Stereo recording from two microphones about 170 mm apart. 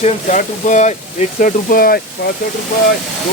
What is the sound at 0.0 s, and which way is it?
Speech, 45° left (ahead or behind).